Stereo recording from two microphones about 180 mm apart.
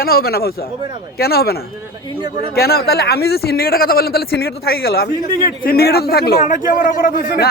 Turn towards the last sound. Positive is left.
turn(degrees=55)  # may be behind; listen again after turning